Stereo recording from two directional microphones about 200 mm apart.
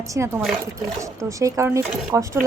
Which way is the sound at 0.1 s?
15° right (ahead or behind).